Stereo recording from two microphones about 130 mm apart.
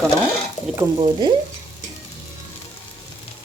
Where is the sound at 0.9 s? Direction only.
40° right (ahead or behind).